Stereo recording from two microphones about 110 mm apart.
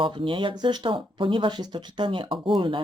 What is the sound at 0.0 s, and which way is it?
Speech, 50° right (ahead or behind).